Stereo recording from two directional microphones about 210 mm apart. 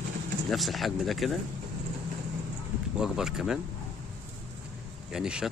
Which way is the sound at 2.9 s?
5° right (ahead or behind).